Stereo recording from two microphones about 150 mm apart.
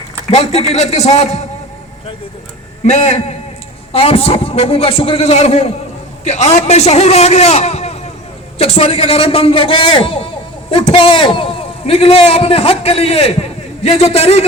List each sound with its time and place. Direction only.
0.3 s a man's voice: 45° left (ahead or behind)
2.8 s a man's voice: 50° left (ahead or behind)